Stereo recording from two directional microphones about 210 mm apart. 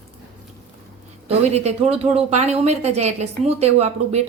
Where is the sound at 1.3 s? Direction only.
30° right (ahead or behind).